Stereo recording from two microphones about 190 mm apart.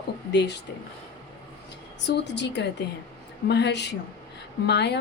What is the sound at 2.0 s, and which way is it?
A woman's voice, 65° left (ahead or behind).